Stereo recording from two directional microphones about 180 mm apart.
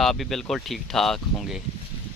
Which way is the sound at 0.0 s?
Centre (ahead or behind).